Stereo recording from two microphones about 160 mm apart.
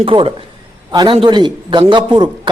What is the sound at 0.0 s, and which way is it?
A man's voice, 35° right (ahead or behind).